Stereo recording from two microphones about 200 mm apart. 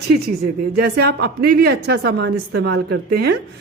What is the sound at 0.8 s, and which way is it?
Speech, 50° right (ahead or behind).